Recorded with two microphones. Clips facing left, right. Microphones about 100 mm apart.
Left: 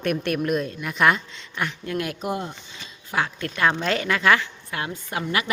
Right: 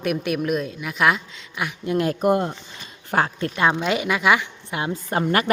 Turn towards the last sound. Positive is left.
turn(degrees=-45)  # may be behind; listen again after turning